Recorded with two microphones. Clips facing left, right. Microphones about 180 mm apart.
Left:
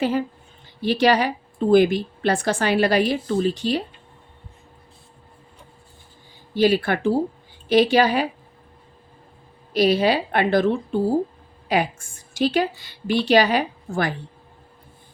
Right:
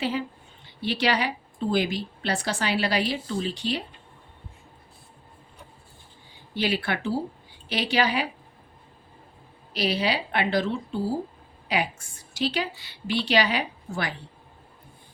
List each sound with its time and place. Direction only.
0.0 s a woman's voice: 45° left (ahead or behind)
6.5 s a woman's voice: 45° left (ahead or behind)
9.7 s a woman's voice: 50° left (ahead or behind)